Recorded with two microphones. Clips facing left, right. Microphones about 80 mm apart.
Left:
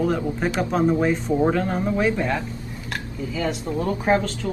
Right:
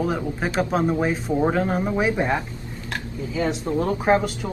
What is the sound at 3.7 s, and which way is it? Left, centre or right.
Speech, centre.